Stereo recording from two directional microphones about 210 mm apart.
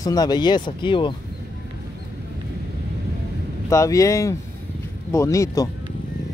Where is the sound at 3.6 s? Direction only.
15° left (ahead or behind).